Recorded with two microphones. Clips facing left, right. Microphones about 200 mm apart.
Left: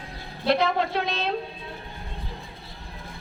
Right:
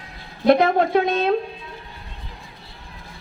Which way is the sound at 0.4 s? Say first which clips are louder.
Right 7 dB; 50° right (ahead or behind).